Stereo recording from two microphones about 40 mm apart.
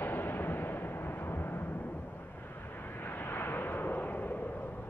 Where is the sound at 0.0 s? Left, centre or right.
Left.